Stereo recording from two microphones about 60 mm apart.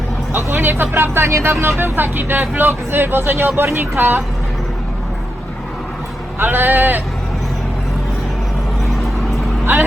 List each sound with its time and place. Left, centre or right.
0.5 s speech: right
6.4 s speech: right